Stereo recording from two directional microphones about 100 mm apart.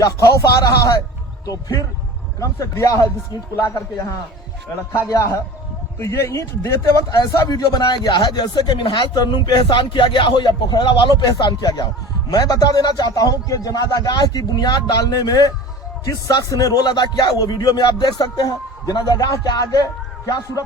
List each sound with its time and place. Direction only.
0.0 s speech: 35° left (ahead or behind)
6.0 s speech: 30° left (ahead or behind)
7.2 s speech: 40° left (ahead or behind)